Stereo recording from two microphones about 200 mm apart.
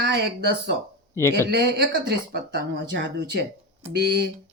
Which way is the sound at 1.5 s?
55° right (ahead or behind).